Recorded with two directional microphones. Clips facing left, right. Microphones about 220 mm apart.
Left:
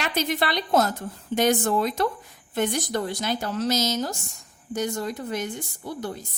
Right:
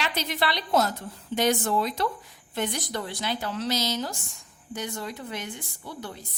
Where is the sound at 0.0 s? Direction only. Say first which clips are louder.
Left 3 dB; 50° left (ahead or behind).